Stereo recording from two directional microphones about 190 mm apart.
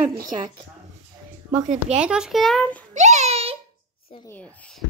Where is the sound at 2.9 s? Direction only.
40° right (ahead or behind).